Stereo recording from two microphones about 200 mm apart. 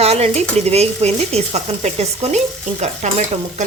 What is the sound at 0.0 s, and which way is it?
Speech, 30° right (ahead or behind).